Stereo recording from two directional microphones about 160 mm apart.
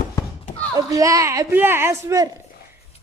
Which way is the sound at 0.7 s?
20° right (ahead or behind).